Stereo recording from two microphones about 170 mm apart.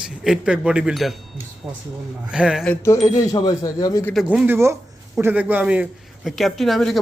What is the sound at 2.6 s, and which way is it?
Speech, 10° left (ahead or behind).